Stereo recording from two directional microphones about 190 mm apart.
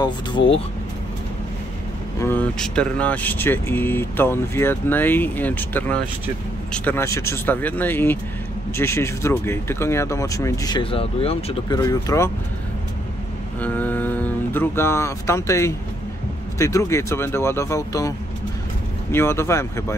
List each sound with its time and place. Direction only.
2.1 s speech: 10° left (ahead or behind); by 11.8 s 30° left (ahead or behind)
11.8 s speech: 15° left (ahead or behind)
13.6 s speech: 10° left (ahead or behind)
19.1 s speech: 15° left (ahead or behind)